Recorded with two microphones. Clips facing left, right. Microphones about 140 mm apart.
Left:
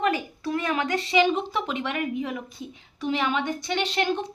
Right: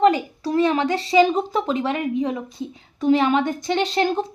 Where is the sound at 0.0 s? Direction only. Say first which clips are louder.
Right 8 dB; 30° right (ahead or behind).